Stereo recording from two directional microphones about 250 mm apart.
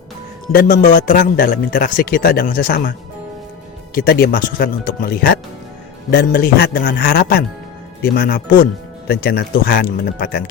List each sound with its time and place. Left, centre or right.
0.5 s a man's voice: left
3.9 s a man's voice: left